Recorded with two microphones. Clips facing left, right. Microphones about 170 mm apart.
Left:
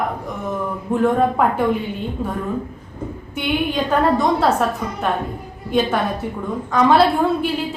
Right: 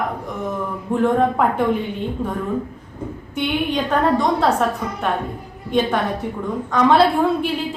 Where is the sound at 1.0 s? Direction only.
5° left (ahead or behind).